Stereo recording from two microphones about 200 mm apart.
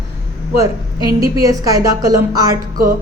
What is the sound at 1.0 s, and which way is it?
A woman's voice, 15° right (ahead or behind).